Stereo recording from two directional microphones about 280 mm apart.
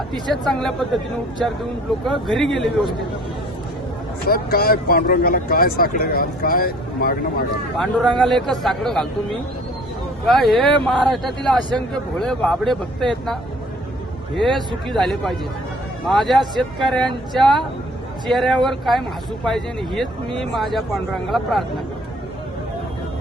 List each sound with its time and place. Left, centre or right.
0.3 s speech: centre
4.3 s speech: left
8.2 s speech: centre
10.2 s speech: centre